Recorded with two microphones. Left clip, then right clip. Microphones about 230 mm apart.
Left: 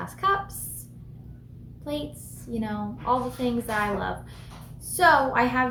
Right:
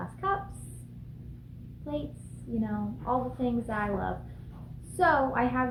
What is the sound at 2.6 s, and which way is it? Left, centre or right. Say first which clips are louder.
A woman's voice: left 4 dB; centre.